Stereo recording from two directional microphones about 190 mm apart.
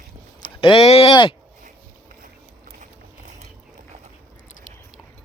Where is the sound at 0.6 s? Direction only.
30° left (ahead or behind).